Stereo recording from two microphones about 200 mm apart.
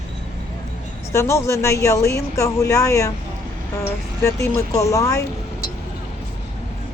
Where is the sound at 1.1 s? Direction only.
15° left (ahead or behind).